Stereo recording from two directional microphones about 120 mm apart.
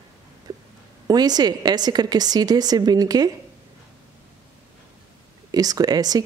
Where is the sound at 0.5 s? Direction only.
35° right (ahead or behind).